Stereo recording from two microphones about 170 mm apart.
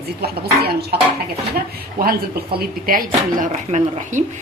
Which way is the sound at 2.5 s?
55° right (ahead or behind).